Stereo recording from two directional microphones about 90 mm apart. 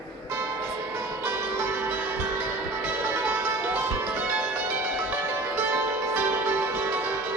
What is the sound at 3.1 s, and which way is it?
Music, 20° right (ahead or behind).